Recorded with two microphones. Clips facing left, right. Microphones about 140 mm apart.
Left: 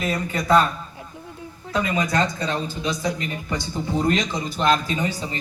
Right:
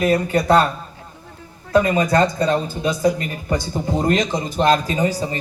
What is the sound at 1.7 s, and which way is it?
A man's voice, 55° right (ahead or behind).